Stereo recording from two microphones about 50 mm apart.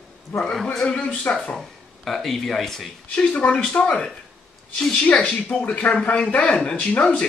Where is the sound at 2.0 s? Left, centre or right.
Centre.